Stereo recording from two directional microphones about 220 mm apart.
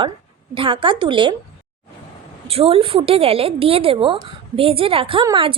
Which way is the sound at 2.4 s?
25° right (ahead or behind).